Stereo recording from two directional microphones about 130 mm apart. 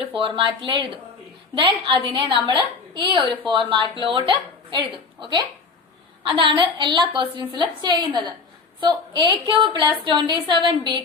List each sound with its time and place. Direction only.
0.0 s a woman's voice: 40° right (ahead or behind)